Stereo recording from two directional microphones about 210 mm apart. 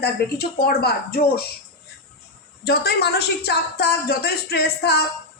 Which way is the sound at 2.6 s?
50° left (ahead or behind).